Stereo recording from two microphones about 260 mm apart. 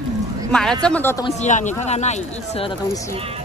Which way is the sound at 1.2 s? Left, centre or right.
Left.